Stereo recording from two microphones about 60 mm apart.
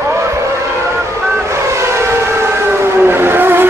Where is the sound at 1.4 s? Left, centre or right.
Right.